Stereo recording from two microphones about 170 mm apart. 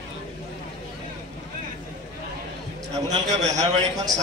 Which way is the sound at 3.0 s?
45° right (ahead or behind).